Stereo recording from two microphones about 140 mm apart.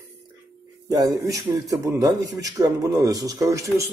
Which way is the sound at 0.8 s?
25° right (ahead or behind).